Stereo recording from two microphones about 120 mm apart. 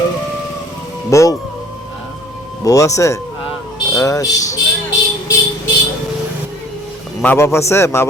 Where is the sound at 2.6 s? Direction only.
25° left (ahead or behind).